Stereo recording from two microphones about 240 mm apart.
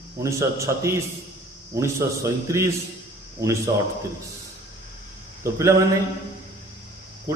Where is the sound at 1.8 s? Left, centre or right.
Centre.